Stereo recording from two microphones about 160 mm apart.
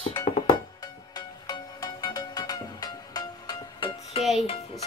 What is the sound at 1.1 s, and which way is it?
Music, 25° left (ahead or behind).